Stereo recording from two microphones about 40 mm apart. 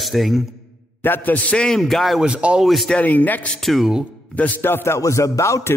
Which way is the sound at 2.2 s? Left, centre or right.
Right.